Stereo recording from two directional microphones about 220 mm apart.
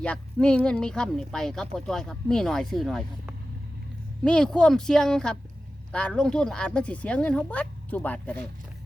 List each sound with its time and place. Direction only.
0.0 s speech: 5° left (ahead or behind)